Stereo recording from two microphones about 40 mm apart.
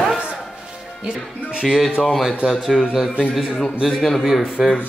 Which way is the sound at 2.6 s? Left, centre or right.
Centre.